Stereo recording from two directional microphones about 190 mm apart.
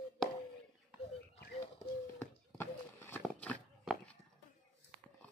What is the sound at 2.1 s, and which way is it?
Horse, 10° left (ahead or behind).